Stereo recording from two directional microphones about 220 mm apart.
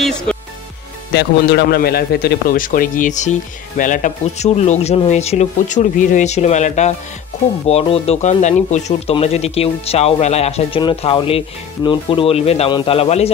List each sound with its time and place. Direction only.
0.0 s music: 5° left (ahead or behind)
1.1 s a man's voice: 45° left (ahead or behind); by 13.3 s 25° left (ahead or behind)